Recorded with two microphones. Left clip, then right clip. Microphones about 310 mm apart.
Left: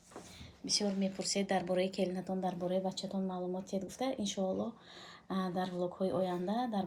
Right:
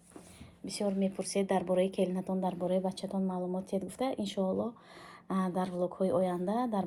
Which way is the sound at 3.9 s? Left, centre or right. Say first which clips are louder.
Right 3 dB; centre.